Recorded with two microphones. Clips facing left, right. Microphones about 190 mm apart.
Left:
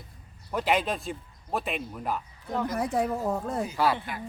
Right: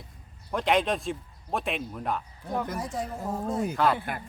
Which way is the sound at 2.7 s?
60° left (ahead or behind).